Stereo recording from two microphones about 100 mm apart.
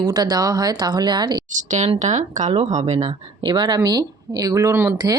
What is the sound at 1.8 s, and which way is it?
Speech, 90° right.